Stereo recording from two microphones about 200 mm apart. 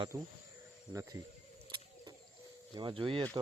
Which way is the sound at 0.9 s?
15° right (ahead or behind).